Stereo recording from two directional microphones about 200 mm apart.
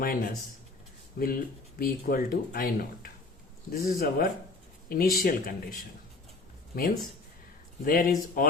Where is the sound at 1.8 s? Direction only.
50° left (ahead or behind).